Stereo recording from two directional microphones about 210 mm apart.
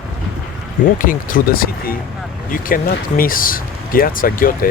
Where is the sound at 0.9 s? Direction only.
40° left (ahead or behind).